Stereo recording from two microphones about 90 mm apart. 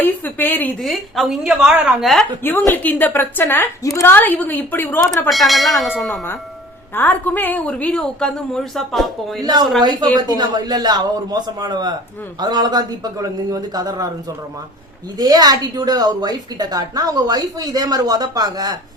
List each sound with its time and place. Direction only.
0.0 s a woman's voice: 20° left (ahead or behind)
0.8 s a woman's voice: centre (ahead or behind)
2.4 s a woman's voice: 25° left (ahead or behind)
4.1 s a woman's voice: 20° left (ahead or behind)
5.3 s a woman's voice: centre (ahead or behind)
6.9 s a woman's voice: 20° left (ahead or behind); by 9.4 s 5° left (ahead or behind)
9.4 s speech: 50° right (ahead or behind)
15.2 s speech: 45° right (ahead or behind)